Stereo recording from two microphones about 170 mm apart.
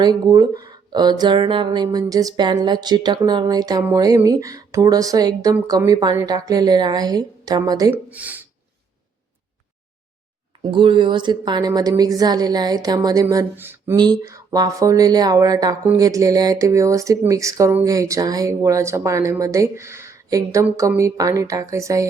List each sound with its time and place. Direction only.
0.0 s speech: 25° right (ahead or behind)
8.1 s speech: 10° right (ahead or behind)
10.7 s speech: 30° right (ahead or behind); by 13.9 s 15° right (ahead or behind)
13.9 s speech: 25° right (ahead or behind)